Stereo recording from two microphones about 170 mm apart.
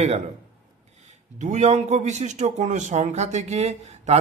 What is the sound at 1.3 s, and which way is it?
A man's voice, 45° right (ahead or behind).